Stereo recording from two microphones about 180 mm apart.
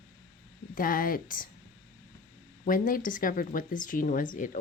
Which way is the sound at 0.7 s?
50° left (ahead or behind).